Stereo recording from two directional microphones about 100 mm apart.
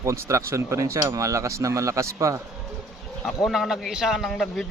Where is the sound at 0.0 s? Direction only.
30° right (ahead or behind).